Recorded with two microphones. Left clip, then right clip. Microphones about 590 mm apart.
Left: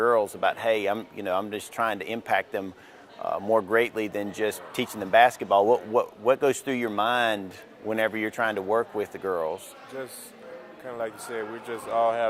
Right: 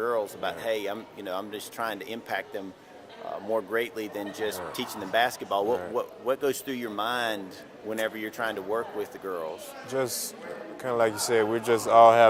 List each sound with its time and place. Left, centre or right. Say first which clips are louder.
0.0 s speech: left 6 dB; left
9.9 s speech: right 9 dB; right